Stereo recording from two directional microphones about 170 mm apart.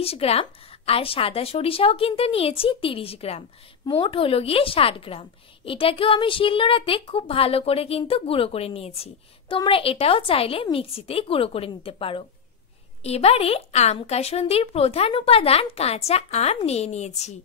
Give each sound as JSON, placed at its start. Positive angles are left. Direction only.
{"t": 0.0, "sound": "a woman's voice", "side_deg": 35}